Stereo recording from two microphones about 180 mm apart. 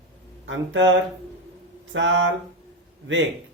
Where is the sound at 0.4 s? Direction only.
90° right.